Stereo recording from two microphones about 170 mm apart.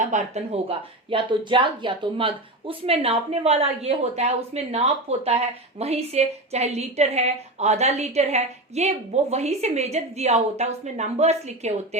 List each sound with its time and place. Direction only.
0.0 s speech: 45° right (ahead or behind)